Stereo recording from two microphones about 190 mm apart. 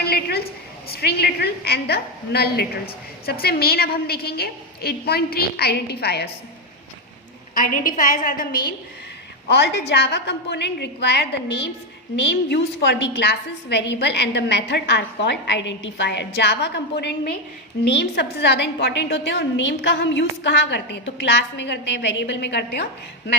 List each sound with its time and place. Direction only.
0.0 s a woman's voice: 55° left (ahead or behind)
7.5 s a woman's voice: 45° left (ahead or behind)
9.5 s a woman's voice: 60° left (ahead or behind)